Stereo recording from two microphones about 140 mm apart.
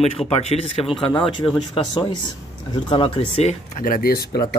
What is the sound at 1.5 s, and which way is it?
Speech, 35° left (ahead or behind).